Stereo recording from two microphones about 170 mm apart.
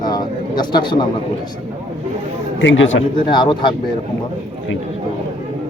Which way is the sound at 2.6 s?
90° left.